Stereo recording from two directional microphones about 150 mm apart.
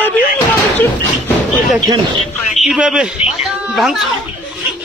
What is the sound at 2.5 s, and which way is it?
A man's voice, 5° right (ahead or behind).